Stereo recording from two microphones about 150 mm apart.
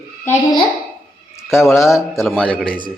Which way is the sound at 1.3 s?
20° left (ahead or behind).